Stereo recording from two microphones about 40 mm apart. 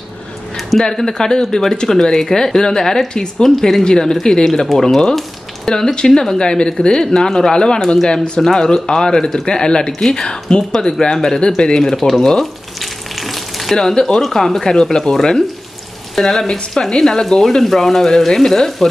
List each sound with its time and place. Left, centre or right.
0.6 s a sound: centre
0.8 s speech: centre
4.5 s speech: centre; by 11.8 s left
11.8 s frying: centre
13.7 s speech: centre